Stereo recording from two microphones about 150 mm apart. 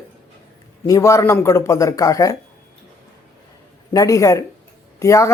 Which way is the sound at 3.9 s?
20° left (ahead or behind).